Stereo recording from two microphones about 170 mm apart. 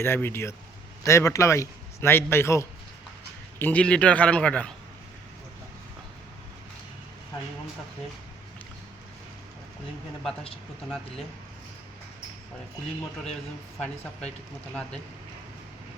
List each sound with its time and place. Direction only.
0.0 s a man's voice: 15° left (ahead or behind)
10.8 s speech: centre (ahead or behind)
13.7 s a man's voice: 5° left (ahead or behind)